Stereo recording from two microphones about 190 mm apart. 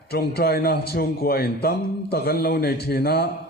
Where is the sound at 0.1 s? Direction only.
55° left (ahead or behind).